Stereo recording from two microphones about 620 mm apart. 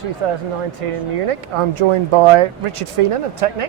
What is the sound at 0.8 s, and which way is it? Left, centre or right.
Speech, right.